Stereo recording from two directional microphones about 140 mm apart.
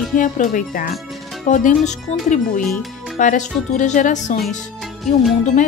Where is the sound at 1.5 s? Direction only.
60° left (ahead or behind).